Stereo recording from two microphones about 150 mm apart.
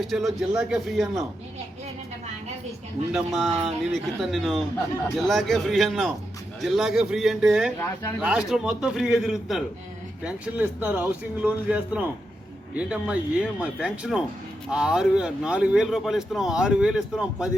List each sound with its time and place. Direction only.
0.0 s speech: centre (ahead or behind)
3.1 s a man's voice: 5° right (ahead or behind)